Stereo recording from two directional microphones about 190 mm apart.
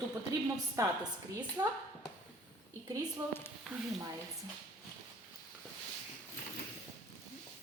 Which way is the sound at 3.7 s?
Centre (ahead or behind).